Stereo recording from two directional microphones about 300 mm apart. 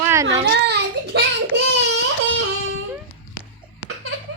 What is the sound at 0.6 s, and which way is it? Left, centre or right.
Child singing, right.